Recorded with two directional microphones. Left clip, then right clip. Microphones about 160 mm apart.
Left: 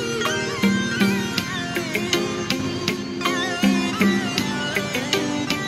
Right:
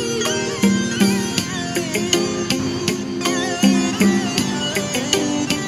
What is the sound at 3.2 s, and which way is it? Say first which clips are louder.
Music: right 2 dB; 25° right (ahead or behind).